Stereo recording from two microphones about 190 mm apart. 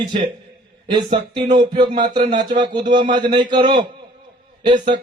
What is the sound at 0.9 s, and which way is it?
Speech, 25° right (ahead or behind).